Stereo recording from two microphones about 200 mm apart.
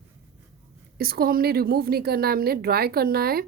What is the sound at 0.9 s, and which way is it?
Speech, 50° right (ahead or behind).